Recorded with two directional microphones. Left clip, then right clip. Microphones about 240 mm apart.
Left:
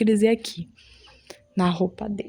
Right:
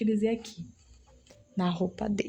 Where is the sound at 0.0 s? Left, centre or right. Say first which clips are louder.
Left 9 dB; left.